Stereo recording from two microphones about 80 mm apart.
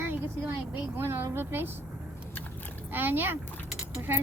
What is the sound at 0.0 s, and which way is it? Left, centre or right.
Vehicle, right.